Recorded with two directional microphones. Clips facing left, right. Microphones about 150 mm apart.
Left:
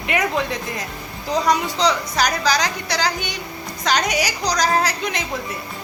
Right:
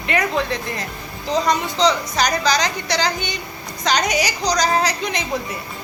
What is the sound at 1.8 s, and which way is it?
A woman's voice, 5° left (ahead or behind).